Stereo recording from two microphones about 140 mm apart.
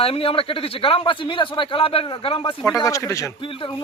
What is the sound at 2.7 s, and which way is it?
Speech, 25° left (ahead or behind).